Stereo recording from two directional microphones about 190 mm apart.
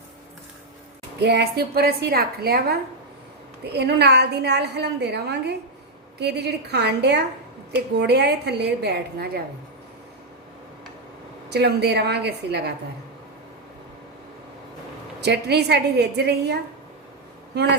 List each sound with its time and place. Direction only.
1.2 s a woman's voice: 60° right (ahead or behind)
11.4 s a woman's voice: 60° right (ahead or behind)
15.2 s a woman's voice: 60° right (ahead or behind)